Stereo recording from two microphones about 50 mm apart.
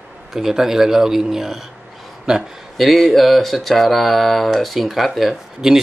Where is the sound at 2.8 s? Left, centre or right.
Centre.